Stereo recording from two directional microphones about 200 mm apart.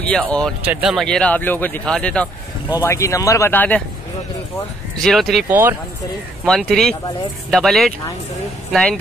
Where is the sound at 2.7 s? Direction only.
15° left (ahead or behind).